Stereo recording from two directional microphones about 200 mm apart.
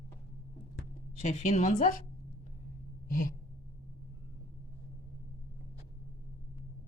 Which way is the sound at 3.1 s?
45° left (ahead or behind).